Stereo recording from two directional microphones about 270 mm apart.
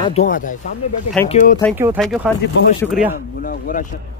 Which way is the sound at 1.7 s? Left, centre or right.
Centre.